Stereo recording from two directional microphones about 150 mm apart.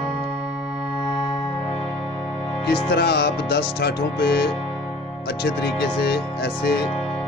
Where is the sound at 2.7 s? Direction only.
90° left.